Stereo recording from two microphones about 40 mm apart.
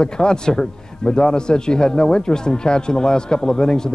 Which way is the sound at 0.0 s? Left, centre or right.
Left.